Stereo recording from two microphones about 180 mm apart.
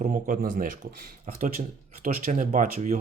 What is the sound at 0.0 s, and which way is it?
Speech, 45° right (ahead or behind).